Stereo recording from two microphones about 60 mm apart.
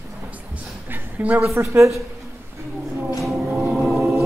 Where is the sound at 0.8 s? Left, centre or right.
Right.